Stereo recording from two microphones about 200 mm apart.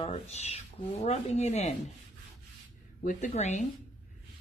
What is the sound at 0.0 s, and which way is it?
Speech, 30° left (ahead or behind).